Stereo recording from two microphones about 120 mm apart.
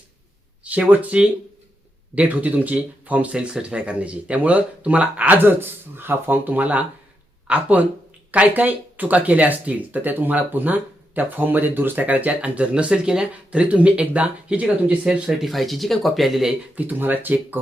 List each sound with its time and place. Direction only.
0.6 s speech: 10° right (ahead or behind)
16.8 s speech: 15° right (ahead or behind)